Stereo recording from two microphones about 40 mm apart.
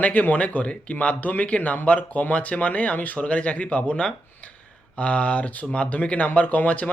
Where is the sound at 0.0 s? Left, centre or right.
Left.